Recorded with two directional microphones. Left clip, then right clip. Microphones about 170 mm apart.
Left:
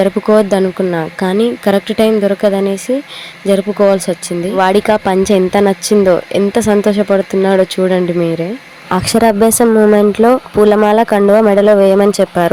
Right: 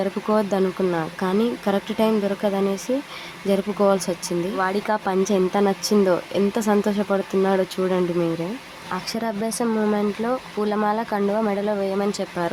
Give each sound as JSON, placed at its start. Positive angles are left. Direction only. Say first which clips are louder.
{"t": 0.0, "sound": "speech", "louder": "left 12 dB", "side_deg": 35}
{"t": 9.6, "sound": "speech", "louder": "left 12 dB", "side_deg": 30}